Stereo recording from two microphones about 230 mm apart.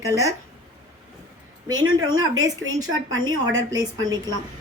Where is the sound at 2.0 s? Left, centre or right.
Centre.